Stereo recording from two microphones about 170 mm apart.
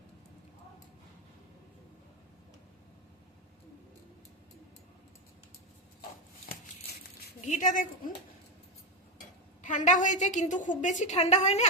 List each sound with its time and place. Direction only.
7.4 s a woman's voice: 45° left (ahead or behind)
9.6 s a woman's voice: 50° left (ahead or behind)